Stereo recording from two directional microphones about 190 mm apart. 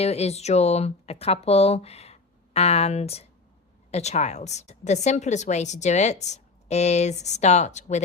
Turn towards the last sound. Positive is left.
turn(degrees=35)  # may be behind; listen again after turning